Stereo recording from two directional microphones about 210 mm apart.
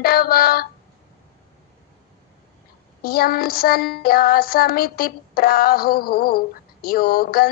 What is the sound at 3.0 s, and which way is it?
Music, 45° left (ahead or behind).